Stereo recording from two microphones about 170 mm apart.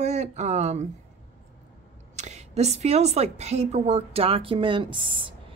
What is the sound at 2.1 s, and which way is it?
Speech, 40° right (ahead or behind).